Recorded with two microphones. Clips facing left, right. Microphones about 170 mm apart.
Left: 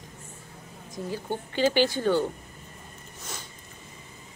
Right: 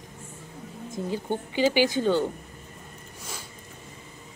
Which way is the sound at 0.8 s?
20° right (ahead or behind).